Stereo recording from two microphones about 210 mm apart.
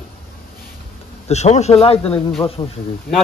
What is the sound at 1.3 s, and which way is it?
Speech, 30° left (ahead or behind).